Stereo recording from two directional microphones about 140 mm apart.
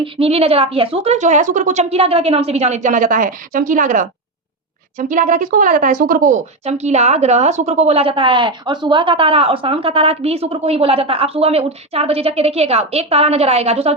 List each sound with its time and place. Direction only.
0.0 s a woman's voice: 45° right (ahead or behind); by 6.4 s 75° right (ahead or behind)
6.7 s a woman's voice: 50° right (ahead or behind)